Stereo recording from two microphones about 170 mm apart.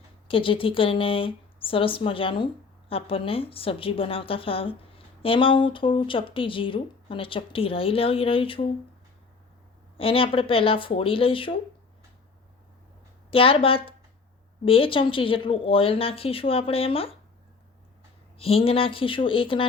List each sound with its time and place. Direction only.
0.3 s a woman's voice: 30° left (ahead or behind)
10.0 s a woman's voice: 35° left (ahead or behind)
13.3 s a woman's voice: 35° left (ahead or behind)
18.3 s a woman's voice: 35° left (ahead or behind)